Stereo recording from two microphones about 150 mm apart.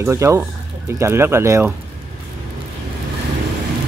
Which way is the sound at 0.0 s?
20° right (ahead or behind).